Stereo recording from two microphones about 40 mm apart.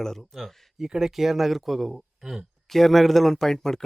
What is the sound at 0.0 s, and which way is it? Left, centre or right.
Speech, centre.